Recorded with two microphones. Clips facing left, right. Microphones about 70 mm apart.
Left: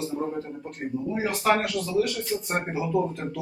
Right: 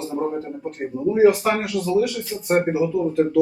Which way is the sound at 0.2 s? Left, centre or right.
Right.